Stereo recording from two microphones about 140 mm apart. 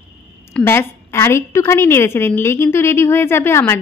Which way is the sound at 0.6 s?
20° left (ahead or behind).